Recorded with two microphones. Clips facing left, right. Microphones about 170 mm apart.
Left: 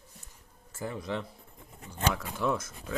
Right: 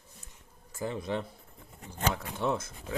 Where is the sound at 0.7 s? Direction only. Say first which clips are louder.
Right 2 dB; 20° right (ahead or behind).